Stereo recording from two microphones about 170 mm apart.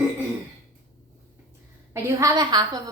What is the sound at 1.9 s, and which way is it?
Speech, 20° right (ahead or behind).